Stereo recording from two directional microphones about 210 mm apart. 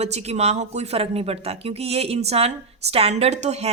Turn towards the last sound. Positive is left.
turn(degrees=-30)  # may be behind; listen again after turning